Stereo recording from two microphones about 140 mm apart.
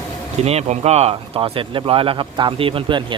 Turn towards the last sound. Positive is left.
turn(degrees=-35)  # may be behind; listen again after turning